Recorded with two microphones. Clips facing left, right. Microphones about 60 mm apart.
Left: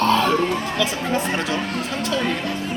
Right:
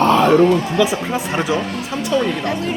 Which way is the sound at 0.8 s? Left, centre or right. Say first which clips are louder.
Right 2 dB; centre.